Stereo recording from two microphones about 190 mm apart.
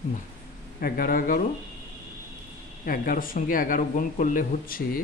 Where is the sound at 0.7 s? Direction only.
50° left (ahead or behind).